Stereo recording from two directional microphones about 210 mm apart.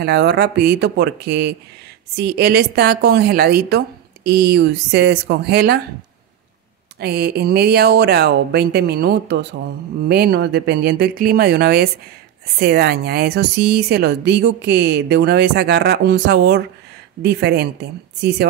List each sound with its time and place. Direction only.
0.0 s a woman's voice: 50° right (ahead or behind)
7.0 s a woman's voice: 50° right (ahead or behind)